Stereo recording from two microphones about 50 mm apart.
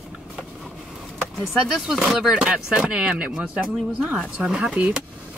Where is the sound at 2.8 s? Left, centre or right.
Centre.